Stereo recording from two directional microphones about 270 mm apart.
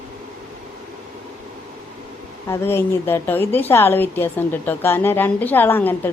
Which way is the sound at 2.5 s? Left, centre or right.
Centre.